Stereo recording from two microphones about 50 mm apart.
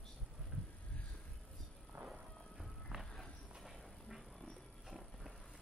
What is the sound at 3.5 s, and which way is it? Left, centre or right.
Clip-clop, centre.